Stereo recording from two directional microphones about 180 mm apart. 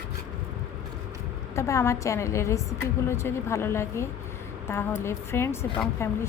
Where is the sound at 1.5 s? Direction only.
15° left (ahead or behind).